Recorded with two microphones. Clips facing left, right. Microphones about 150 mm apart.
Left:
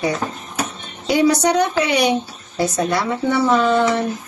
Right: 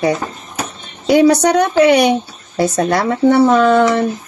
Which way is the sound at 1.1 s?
55° right (ahead or behind).